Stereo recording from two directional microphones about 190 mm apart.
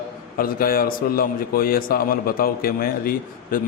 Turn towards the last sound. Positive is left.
turn(degrees=50)  # may be behind; listen again after turning